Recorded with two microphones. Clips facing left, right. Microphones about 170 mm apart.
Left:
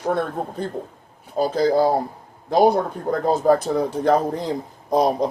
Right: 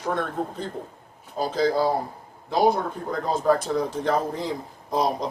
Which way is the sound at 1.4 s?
45° left (ahead or behind).